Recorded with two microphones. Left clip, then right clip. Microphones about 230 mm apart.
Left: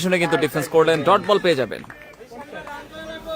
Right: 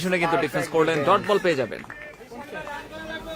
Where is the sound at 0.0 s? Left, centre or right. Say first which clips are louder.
Left 3 dB; left.